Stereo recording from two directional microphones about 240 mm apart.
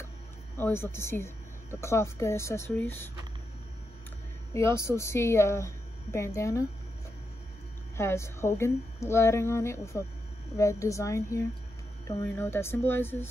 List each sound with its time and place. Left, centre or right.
0.6 s speech: centre
4.6 s speech: centre
8.0 s speech: centre